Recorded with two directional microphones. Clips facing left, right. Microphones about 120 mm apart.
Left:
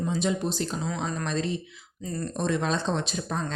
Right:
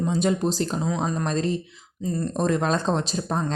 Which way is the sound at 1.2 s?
40° right (ahead or behind).